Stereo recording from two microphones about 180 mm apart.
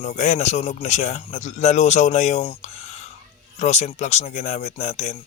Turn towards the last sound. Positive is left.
turn(degrees=40)  # may be behind; listen again after turning